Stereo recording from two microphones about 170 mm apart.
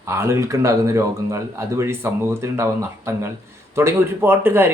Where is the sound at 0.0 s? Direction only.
15° right (ahead or behind).